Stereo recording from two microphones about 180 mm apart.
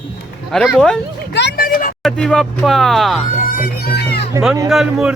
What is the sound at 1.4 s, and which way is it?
Speech, 65° left (ahead or behind).